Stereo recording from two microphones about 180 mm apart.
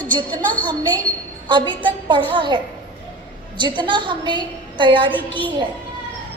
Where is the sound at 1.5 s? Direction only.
25° right (ahead or behind).